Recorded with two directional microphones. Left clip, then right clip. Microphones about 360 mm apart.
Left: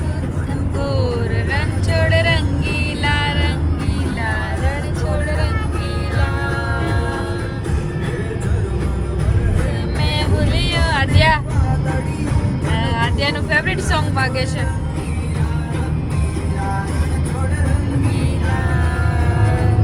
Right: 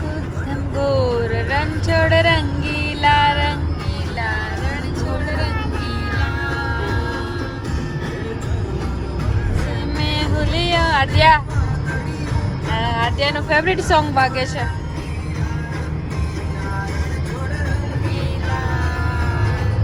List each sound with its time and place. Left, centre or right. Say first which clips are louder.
0.8 s vehicle: right 4 dB; centre
10.0 s music: left 1 dB; centre
12.7 s vehicle: right 2 dB; centre